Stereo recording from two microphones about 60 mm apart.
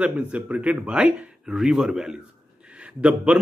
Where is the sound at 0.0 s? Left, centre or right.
Right.